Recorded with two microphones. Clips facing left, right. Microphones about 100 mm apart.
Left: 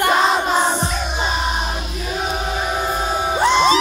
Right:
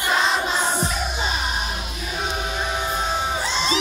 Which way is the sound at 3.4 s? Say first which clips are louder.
Left 10 dB; 60° left (ahead or behind).